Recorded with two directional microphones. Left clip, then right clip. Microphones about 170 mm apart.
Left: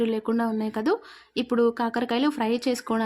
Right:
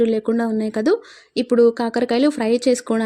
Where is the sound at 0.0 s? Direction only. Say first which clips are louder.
Right 7 dB; 15° right (ahead or behind).